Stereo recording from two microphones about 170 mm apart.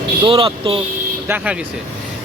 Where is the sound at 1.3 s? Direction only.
10° right (ahead or behind).